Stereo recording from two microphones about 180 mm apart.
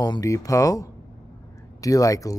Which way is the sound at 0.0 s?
20° left (ahead or behind).